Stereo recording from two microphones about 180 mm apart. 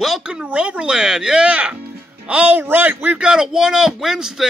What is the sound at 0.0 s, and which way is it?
Speech, 5° right (ahead or behind).